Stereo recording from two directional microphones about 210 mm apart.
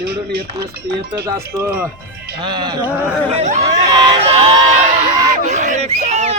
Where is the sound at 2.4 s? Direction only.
20° right (ahead or behind).